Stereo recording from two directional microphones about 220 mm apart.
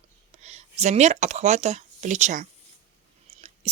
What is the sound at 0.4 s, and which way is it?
Speech, 30° right (ahead or behind).